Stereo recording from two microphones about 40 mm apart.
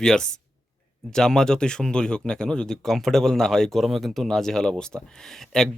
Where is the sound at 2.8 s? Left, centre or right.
Centre.